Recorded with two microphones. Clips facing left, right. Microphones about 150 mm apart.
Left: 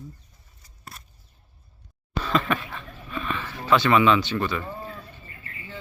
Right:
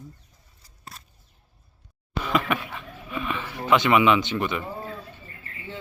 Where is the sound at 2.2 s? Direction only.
15° right (ahead or behind).